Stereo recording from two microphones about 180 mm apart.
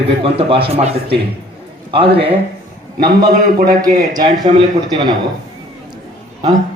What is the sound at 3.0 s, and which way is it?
A man's voice, 25° right (ahead or behind).